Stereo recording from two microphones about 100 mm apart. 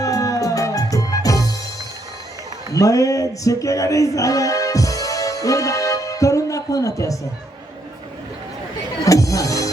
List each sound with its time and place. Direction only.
0.0 s music: 35° left (ahead or behind)
2.7 s music: 35° left (ahead or behind)
9.0 s music: 35° left (ahead or behind)